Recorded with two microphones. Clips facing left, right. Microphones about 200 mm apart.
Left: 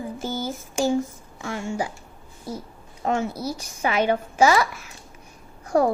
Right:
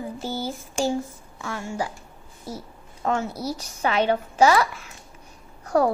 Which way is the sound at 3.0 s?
20° left (ahead or behind).